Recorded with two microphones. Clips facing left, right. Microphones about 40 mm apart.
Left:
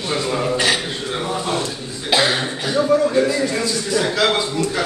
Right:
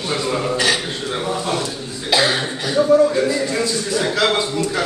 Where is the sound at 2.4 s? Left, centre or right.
Centre.